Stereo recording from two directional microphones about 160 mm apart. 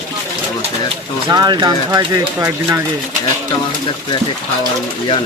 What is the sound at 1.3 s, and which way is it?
Speech, 25° right (ahead or behind).